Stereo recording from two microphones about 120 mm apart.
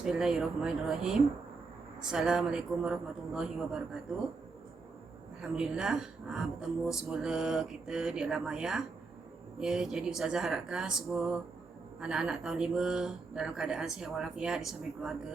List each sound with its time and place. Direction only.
0.0 s speech: 5° right (ahead or behind)
5.4 s speech: 5° right (ahead or behind)